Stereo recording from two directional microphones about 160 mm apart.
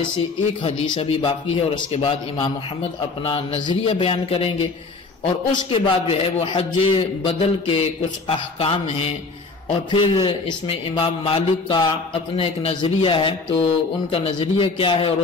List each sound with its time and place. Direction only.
0.6 s a man's voice: 30° left (ahead or behind)